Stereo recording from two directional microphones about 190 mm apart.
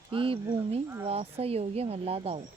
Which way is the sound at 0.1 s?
30° right (ahead or behind).